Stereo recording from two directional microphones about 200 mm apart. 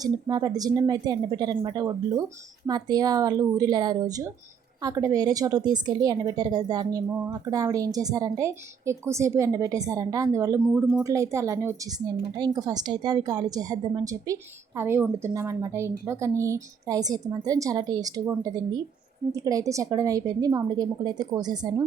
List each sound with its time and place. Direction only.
0.0 s a woman's voice: 20° right (ahead or behind)